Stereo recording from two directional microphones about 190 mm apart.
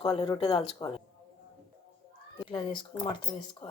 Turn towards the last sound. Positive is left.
turn(degrees=25)  # may be behind; listen again after turning